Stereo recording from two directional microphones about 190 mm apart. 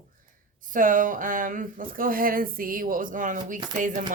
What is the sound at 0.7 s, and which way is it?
A woman's voice, 45° right (ahead or behind).